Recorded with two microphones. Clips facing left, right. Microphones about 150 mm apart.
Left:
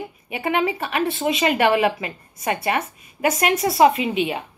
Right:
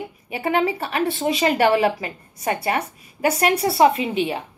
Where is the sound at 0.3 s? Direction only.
30° right (ahead or behind).